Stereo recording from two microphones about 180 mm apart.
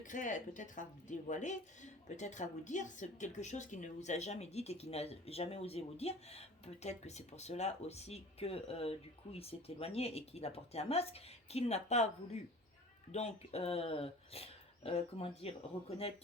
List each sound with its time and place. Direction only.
0.0 s a woman's voice: 45° left (ahead or behind)